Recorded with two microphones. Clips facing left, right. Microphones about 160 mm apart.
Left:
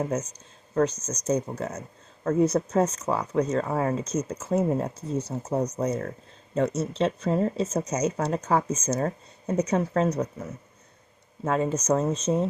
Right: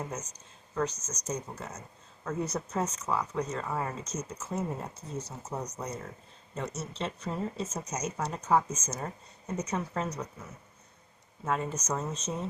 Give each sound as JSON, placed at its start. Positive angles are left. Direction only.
{"t": 0.7, "sound": "speech", "side_deg": 60}
{"t": 11.4, "sound": "speech", "side_deg": 85}